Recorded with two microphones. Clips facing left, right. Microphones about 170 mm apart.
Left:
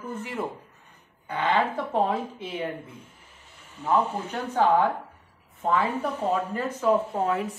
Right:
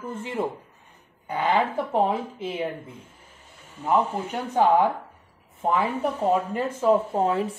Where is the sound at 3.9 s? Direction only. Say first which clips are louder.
Right 1 dB; 15° right (ahead or behind).